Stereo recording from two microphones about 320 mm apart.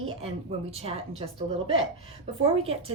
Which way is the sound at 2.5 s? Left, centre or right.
Centre.